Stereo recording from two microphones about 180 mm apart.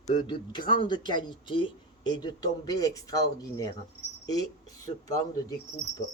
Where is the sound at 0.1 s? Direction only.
25° left (ahead or behind).